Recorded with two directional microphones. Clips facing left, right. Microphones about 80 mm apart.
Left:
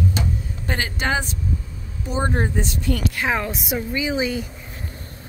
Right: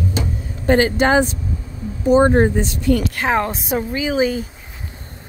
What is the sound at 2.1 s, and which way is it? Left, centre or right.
A woman's voice, right.